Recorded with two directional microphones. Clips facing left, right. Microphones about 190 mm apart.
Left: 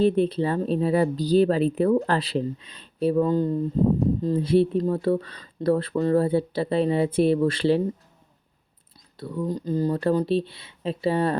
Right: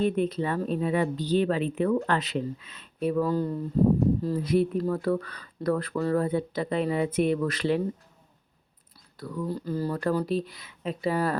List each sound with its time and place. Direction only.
0.0 s speech: 30° left (ahead or behind)
9.1 s speech: 25° left (ahead or behind)